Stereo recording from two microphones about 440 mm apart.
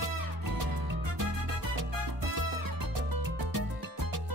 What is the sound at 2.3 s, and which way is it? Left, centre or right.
Music, right.